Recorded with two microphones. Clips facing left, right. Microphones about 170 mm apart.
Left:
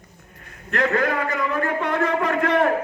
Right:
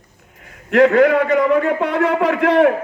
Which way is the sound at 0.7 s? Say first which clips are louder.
Right 10 dB; 75° right (ahead or behind).